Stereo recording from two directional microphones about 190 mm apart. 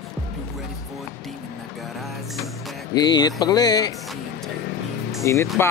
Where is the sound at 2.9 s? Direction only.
20° left (ahead or behind).